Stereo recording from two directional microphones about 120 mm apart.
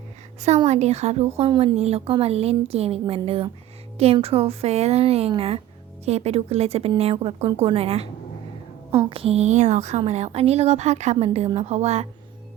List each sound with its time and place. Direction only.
0.4 s a woman's voice: 70° right (ahead or behind)
1.5 s a woman's voice: 50° right (ahead or behind)
9.0 s a woman's voice: 50° right (ahead or behind)